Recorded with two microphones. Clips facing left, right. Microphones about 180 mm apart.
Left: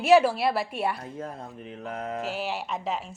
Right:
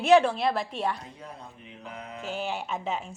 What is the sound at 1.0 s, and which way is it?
Speech, 50° left (ahead or behind).